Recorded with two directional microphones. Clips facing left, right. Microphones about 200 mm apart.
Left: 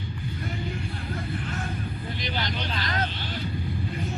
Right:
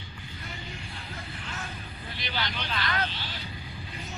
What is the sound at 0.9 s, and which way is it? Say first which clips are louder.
Music: left 9 dB; 50° left (ahead or behind).